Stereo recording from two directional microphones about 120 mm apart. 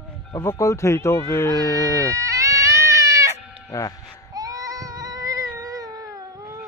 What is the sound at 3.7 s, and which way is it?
Speech, 30° left (ahead or behind).